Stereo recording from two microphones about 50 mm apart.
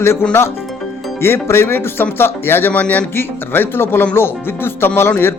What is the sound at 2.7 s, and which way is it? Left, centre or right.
Speech, left.